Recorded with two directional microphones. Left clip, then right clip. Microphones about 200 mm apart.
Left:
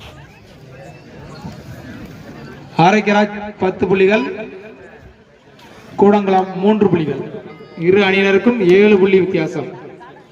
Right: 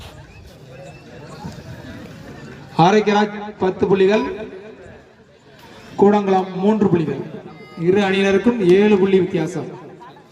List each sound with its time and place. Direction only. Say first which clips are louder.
2.7 s a man's voice: left 2 dB; 5° left (ahead or behind)
6.0 s a man's voice: left 3 dB; 10° right (ahead or behind)
7.8 s a man's voice: left 4 dB; 35° right (ahead or behind)